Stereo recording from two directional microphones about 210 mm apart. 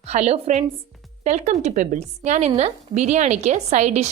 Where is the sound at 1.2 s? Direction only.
35° right (ahead or behind).